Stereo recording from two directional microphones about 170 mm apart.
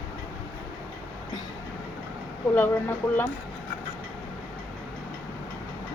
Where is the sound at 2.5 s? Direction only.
10° left (ahead or behind).